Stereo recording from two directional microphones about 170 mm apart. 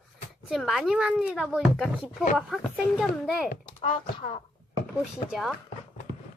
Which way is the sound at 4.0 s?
35° left (ahead or behind).